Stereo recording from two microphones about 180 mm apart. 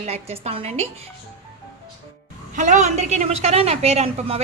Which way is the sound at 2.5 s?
45° right (ahead or behind).